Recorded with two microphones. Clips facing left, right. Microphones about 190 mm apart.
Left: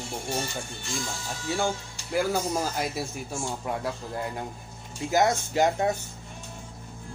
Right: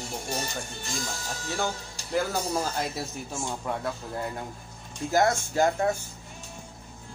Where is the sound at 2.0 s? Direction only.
35° right (ahead or behind).